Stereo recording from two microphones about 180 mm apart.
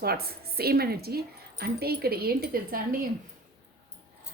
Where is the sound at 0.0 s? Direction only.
60° right (ahead or behind).